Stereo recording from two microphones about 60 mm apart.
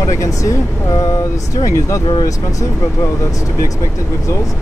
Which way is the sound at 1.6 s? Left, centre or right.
Left.